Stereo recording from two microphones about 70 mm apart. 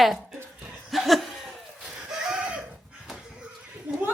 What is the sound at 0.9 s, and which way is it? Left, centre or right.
Chuckle, centre.